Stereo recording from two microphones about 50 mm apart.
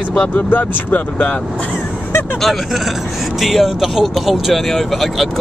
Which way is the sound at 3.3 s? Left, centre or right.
Centre.